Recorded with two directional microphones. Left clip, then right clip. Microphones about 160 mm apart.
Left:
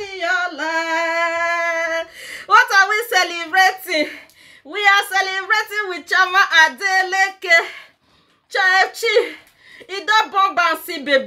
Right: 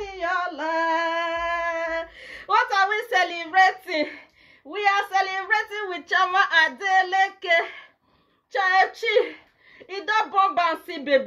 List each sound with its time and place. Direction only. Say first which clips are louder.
0.0 s singing: left 6 dB; 25° left (ahead or behind)
4.9 s speech: left 6 dB; 20° left (ahead or behind)